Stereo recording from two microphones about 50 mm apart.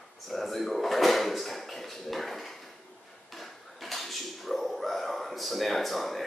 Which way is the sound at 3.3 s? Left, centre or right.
Centre.